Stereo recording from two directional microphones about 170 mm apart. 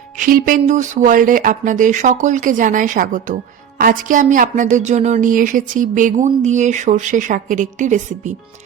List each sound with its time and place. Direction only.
0.2 s music: 55° right (ahead or behind)
0.6 s speech: 45° right (ahead or behind)